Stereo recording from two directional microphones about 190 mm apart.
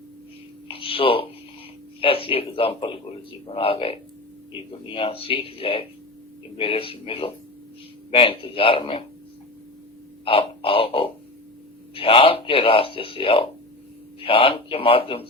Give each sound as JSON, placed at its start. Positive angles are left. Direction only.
{"t": 0.7, "sound": "a sound", "side_deg": 30}
{"t": 2.0, "sound": "a man's voice", "side_deg": 30}
{"t": 10.2, "sound": "a man's voice", "side_deg": 30}